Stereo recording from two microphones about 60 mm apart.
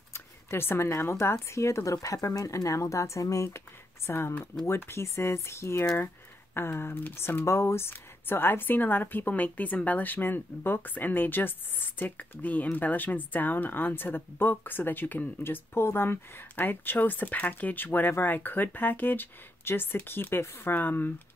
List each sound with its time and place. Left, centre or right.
0.1 s a sound: left
0.8 s speech: left
3.5 s speech: left
7.9 s a woman's voice: left